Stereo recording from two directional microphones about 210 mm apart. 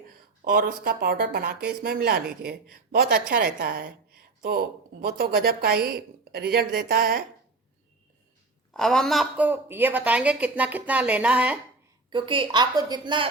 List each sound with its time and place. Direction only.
0.4 s a woman's voice: 45° right (ahead or behind)
8.7 s a woman's voice: centre (ahead or behind)
12.1 s a woman's voice: 25° right (ahead or behind)